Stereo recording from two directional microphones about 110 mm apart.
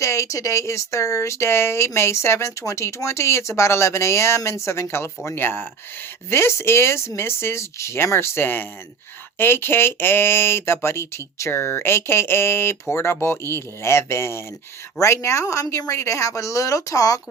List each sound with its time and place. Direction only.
0.0 s speech: 25° left (ahead or behind)